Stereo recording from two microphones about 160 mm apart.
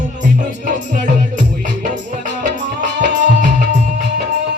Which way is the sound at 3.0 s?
50° right (ahead or behind).